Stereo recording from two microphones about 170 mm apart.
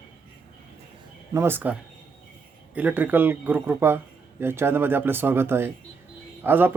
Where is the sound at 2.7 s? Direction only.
10° right (ahead or behind).